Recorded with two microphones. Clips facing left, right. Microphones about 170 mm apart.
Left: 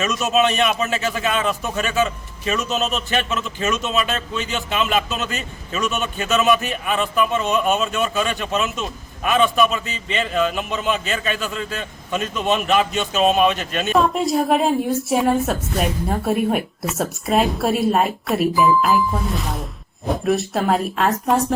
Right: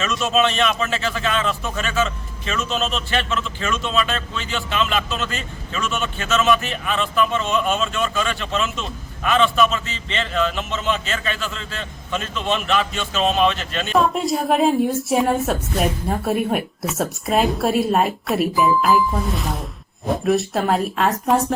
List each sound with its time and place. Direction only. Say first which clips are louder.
0.0 s a man's voice: left 1 dB; 20° left (ahead or behind)
13.9 s a woman's voice: left 1 dB; centre (ahead or behind)